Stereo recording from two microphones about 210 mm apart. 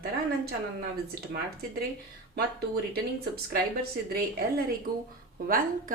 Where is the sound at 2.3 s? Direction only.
50° right (ahead or behind).